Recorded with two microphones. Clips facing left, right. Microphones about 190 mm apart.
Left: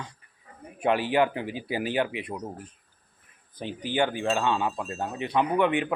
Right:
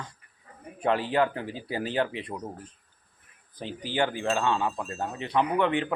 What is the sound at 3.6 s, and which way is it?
A man's voice, 15° left (ahead or behind).